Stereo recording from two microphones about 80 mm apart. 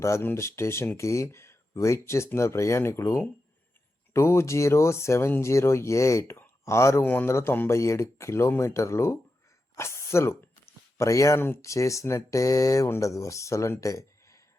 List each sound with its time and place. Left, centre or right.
0.0 s speech: left
7.1 s speech: left
9.7 s a sound: left
11.3 s speech: left
11.7 s speech: left